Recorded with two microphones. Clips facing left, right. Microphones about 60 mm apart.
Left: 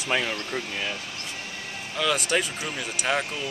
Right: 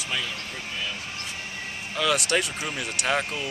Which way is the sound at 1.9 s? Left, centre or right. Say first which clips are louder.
Right 1 dB; centre.